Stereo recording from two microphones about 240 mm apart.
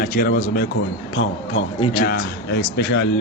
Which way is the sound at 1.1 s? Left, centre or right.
Left.